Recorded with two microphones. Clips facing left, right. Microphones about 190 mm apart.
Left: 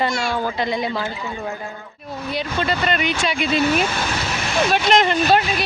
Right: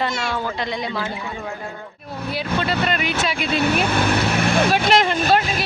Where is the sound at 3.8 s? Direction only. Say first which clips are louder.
Right 5 dB; 60° right (ahead or behind).